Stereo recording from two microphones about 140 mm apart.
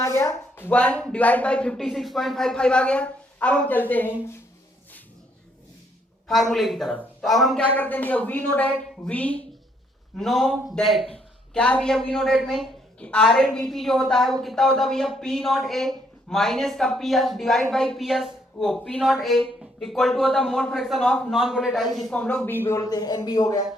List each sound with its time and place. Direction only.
0.0 s speech: 20° left (ahead or behind)
6.2 s speech: centre (ahead or behind)
7.8 s speech: 10° left (ahead or behind); by 23.6 s 30° left (ahead or behind)